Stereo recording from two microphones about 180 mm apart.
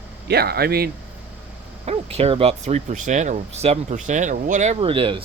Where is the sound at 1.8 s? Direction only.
35° right (ahead or behind).